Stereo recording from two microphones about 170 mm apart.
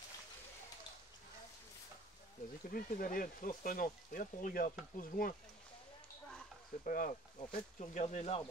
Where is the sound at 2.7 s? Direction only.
55° left (ahead or behind).